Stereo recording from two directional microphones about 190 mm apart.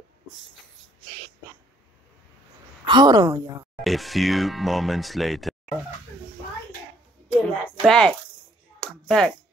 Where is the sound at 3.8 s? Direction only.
Centre (ahead or behind).